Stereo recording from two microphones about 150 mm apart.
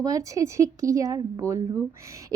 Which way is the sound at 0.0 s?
20° right (ahead or behind).